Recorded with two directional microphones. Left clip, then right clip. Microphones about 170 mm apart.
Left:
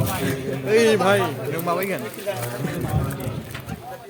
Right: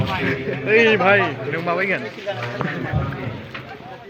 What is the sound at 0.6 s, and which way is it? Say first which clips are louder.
A man's voice: right 3 dB; 15° left (ahead or behind).